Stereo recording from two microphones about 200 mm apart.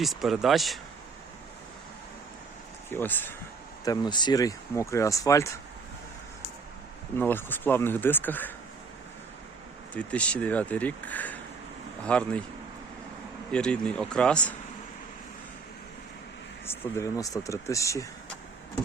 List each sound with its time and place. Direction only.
0.0 s speech: centre (ahead or behind)
2.9 s speech: 10° left (ahead or behind)
3.8 s speech: 20° left (ahead or behind)
7.2 s speech: 10° left (ahead or behind)
9.9 s speech: 5° left (ahead or behind)
13.5 s speech: 5° left (ahead or behind)
16.6 s speech: 15° left (ahead or behind)